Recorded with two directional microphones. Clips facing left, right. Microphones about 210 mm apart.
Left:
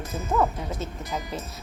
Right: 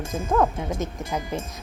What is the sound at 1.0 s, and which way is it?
Speech, 25° right (ahead or behind).